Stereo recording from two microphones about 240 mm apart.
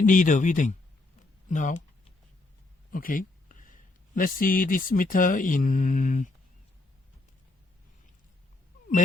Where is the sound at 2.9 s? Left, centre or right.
Left.